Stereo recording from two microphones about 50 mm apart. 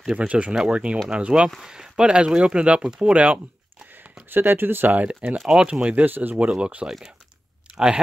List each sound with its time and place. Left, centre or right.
0.3 s speech: right
4.3 s speech: right
4.9 s speech: right
6.0 s speech: right
6.5 s speech: right